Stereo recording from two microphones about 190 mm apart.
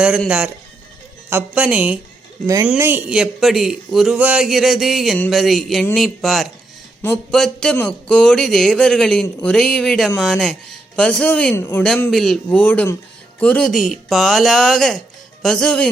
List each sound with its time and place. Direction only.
0.0 s a man's voice: 5° right (ahead or behind)